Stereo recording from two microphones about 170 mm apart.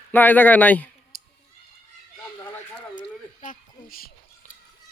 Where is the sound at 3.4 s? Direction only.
55° left (ahead or behind).